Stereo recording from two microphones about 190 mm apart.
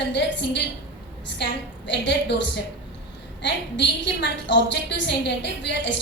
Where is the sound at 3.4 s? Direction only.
65° left (ahead or behind).